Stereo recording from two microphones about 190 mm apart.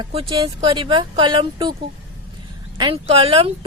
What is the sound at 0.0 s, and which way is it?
A woman's voice, 30° right (ahead or behind).